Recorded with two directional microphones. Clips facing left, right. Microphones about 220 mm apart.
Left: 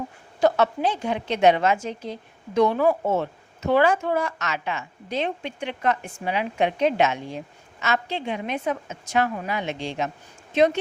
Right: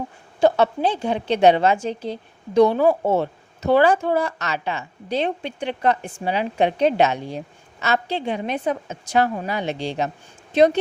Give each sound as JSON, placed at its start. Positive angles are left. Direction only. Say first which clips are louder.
{"t": 0.3, "sound": "a woman's voice", "louder": "right 3 dB", "side_deg": -30}